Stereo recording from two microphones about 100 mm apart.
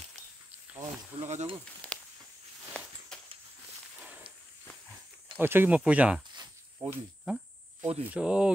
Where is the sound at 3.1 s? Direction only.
5° left (ahead or behind).